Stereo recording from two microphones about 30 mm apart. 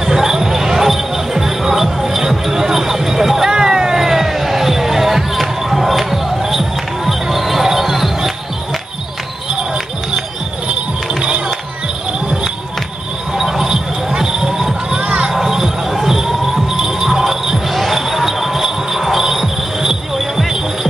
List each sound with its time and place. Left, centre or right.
0.0 s basketball bounce: centre
2.0 s music: centre
3.4 s vehicle: centre
3.9 s basketball bounce: centre
7.1 s basketball bounce: centre
13.4 s basketball bounce: centre
15.3 s crowd: centre
16.7 s music: centre
17.7 s basketball bounce: centre
19.2 s music: centre